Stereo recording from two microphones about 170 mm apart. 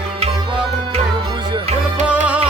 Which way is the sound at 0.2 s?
35° right (ahead or behind).